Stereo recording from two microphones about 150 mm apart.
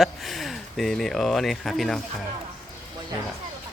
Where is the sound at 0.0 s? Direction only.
Centre (ahead or behind).